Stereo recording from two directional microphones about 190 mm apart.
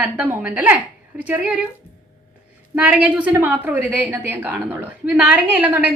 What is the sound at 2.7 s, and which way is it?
A woman's voice, 5° right (ahead or behind).